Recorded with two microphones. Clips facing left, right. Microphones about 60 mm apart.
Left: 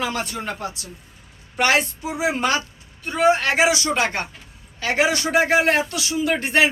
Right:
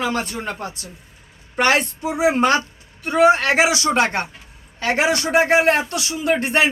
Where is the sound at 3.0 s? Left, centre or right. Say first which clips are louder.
Right 3 dB; right.